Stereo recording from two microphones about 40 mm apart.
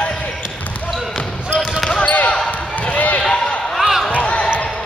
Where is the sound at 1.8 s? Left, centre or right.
Centre.